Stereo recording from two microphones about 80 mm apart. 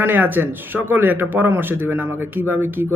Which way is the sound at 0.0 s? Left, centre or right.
Right.